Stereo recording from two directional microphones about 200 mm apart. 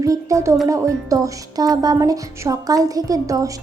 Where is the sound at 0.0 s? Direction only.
15° right (ahead or behind).